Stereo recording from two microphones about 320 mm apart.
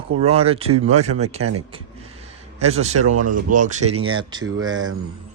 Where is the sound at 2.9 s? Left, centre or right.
Right.